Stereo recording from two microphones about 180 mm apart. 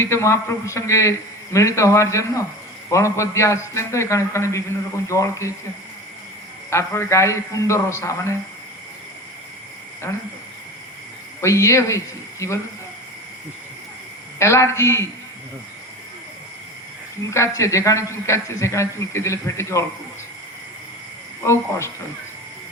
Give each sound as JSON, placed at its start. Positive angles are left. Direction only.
{"t": 0.0, "sound": "a man's voice", "side_deg": 15}
{"t": 6.7, "sound": "a man's voice", "side_deg": 15}
{"t": 11.3, "sound": "a man's voice", "side_deg": 15}
{"t": 14.3, "sound": "a man's voice", "side_deg": 15}
{"t": 17.3, "sound": "a man's voice", "side_deg": 15}
{"t": 21.4, "sound": "a man's voice", "side_deg": 15}